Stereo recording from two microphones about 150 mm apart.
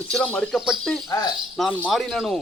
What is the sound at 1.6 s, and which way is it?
Speech, 10° left (ahead or behind).